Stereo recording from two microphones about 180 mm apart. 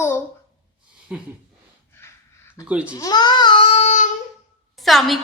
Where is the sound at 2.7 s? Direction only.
5° right (ahead or behind).